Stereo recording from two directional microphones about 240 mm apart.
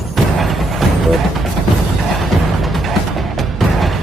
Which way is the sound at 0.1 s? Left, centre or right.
Centre.